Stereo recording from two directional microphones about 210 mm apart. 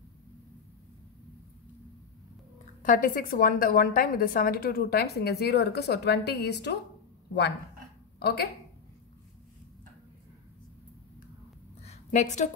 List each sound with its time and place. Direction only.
2.8 s a woman's voice: 40° left (ahead or behind)
8.2 s speech: 50° left (ahead or behind)
11.8 s a sound: 35° left (ahead or behind)